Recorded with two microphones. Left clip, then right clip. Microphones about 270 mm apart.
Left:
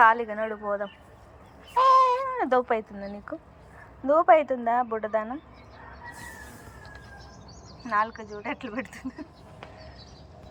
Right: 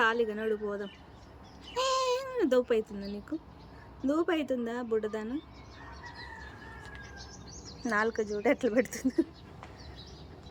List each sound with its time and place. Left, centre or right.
0.0 s a woman's voice: centre
7.9 s speech: centre